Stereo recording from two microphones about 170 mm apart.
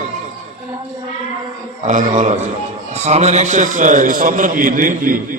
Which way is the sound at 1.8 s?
45° right (ahead or behind).